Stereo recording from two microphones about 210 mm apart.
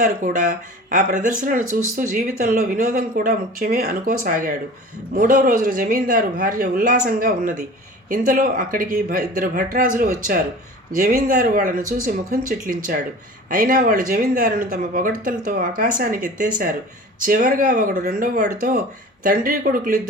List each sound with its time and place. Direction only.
0.0 s speech: 40° right (ahead or behind)